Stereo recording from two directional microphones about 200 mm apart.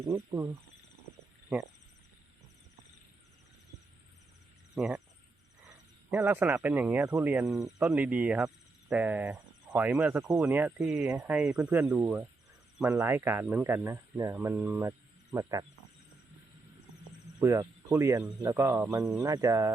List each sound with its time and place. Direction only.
0.0 s speech: 15° right (ahead or behind)
4.7 s speech: centre (ahead or behind)
6.1 s speech: 5° right (ahead or behind)
17.4 s speech: 15° right (ahead or behind)
18.2 s speech: centre (ahead or behind)
18.4 s speech: 15° right (ahead or behind)